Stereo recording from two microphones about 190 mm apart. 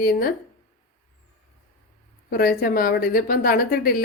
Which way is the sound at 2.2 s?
50° left (ahead or behind).